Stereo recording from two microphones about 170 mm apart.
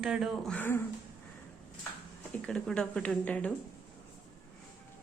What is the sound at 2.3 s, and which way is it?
A woman's voice, 5° left (ahead or behind).